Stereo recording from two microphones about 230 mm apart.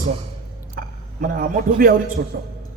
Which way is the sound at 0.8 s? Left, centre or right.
Right.